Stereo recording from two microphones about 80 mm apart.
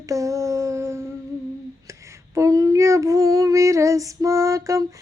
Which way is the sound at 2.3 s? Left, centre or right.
Right.